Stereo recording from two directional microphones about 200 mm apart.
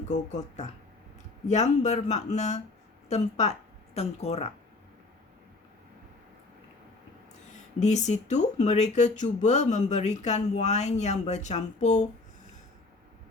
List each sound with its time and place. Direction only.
0.1 s speech: 35° left (ahead or behind)
7.5 s speech: 35° left (ahead or behind)